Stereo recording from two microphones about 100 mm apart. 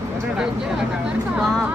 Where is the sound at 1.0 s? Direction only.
Centre (ahead or behind).